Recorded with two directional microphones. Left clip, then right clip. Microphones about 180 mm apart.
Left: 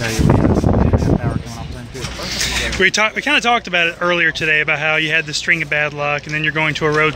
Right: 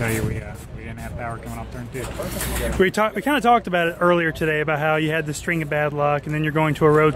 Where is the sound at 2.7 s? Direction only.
30° right (ahead or behind).